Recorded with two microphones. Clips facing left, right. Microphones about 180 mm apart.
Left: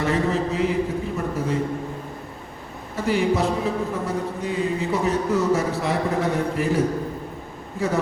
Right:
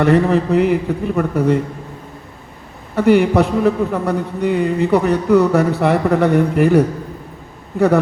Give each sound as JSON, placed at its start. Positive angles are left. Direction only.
{"t": 0.0, "sound": "a man's voice", "side_deg": -65}
{"t": 2.9, "sound": "a man's voice", "side_deg": -65}